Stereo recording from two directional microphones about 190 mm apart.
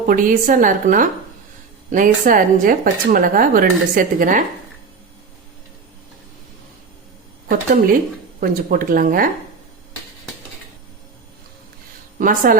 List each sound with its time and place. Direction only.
0.1 s a woman's voice: 45° right (ahead or behind)
7.4 s a woman's voice: 50° right (ahead or behind)
12.2 s a woman's voice: 45° right (ahead or behind)